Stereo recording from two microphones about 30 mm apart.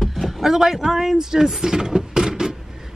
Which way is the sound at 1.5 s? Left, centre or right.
Centre.